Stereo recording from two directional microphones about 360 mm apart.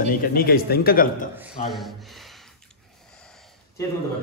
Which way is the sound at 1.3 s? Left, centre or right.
Centre.